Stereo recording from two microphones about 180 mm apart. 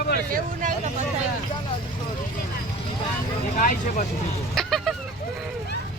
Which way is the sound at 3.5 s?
45° left (ahead or behind).